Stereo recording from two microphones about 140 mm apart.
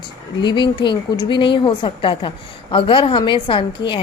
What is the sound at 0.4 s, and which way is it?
A woman's voice, 35° left (ahead or behind).